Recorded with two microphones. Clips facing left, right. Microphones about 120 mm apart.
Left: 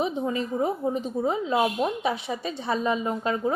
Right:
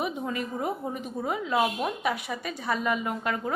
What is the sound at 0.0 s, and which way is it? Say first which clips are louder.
A woman's voice: left 4 dB; 25° left (ahead or behind).